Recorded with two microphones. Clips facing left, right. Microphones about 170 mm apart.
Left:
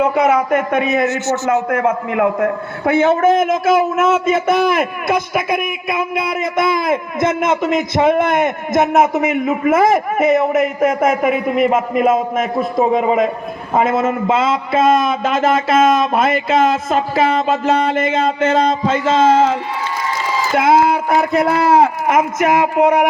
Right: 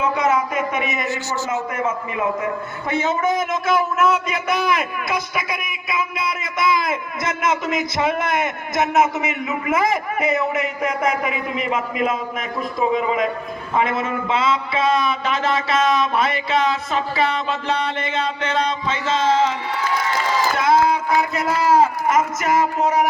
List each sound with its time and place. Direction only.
0.0 s a man's voice: 60° left (ahead or behind)
20.6 s a man's voice: 55° left (ahead or behind)